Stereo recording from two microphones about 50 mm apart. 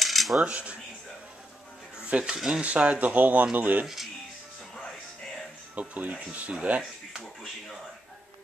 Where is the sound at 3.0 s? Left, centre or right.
Right.